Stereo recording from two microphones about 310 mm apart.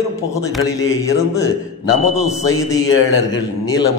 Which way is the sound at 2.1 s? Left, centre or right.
Centre.